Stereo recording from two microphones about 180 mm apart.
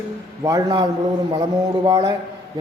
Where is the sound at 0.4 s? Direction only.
20° right (ahead or behind).